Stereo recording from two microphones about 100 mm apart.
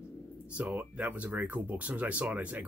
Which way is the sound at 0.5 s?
15° right (ahead or behind).